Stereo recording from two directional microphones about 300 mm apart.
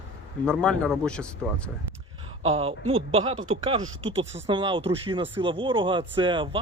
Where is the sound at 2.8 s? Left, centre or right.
Right.